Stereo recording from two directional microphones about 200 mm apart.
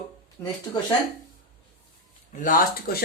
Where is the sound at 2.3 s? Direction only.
45° left (ahead or behind).